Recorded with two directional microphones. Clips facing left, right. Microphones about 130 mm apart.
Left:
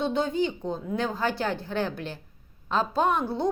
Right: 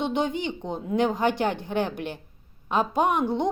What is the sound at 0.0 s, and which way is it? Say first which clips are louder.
A woman's voice: left 1 dB; 20° right (ahead or behind).